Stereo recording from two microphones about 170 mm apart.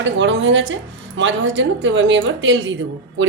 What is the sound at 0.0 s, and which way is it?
A woman's voice, 90° right.